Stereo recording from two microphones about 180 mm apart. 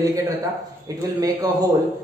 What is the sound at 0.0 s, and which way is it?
A man's voice, 20° right (ahead or behind).